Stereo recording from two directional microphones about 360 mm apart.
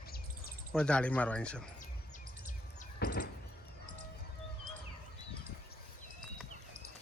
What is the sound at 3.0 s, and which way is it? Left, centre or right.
Door, left.